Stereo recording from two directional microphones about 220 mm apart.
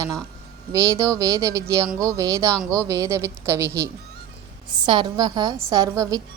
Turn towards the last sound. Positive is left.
turn(degrees=-15)  # may be behind; listen again after turning